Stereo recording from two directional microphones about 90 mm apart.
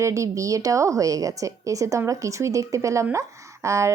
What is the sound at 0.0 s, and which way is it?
A woman's voice, 35° right (ahead or behind).